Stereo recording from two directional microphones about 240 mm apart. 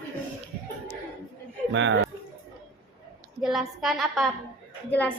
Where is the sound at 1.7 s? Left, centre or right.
Right.